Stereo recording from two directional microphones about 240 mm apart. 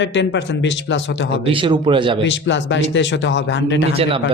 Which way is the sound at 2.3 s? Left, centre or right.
Left.